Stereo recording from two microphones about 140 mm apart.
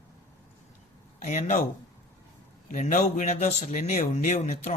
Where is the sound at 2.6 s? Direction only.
65° left (ahead or behind).